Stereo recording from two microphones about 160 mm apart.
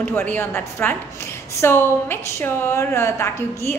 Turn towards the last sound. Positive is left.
turn(degrees=15)  # may be behind; listen again after turning